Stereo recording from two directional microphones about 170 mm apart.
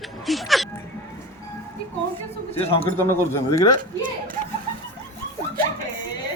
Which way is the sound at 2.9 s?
15° left (ahead or behind).